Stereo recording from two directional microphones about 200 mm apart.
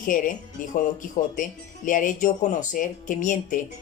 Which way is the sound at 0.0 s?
40° left (ahead or behind).